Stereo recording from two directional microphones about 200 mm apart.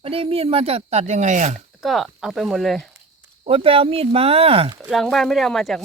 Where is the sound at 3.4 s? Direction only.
30° right (ahead or behind).